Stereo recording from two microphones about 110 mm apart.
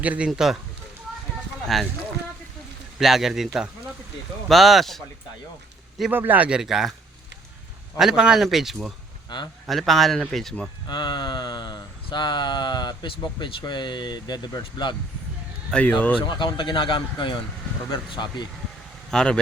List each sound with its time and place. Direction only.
0.0 s speech: 15° right (ahead or behind)
0.3 s speech: 5° right (ahead or behind)
1.6 s speech: centre (ahead or behind)
3.0 s speech: centre (ahead or behind)
6.1 s speech: 15° right (ahead or behind)
7.9 s speech: 5° right (ahead or behind)
9.3 s a man's voice: 40° left (ahead or behind)
9.6 s speech: centre (ahead or behind)
10.8 s a sound: 40° left (ahead or behind)
15.7 s speech: 10° left (ahead or behind)
16.1 s a sound: 45° left (ahead or behind)
19.1 s speech: 10° left (ahead or behind)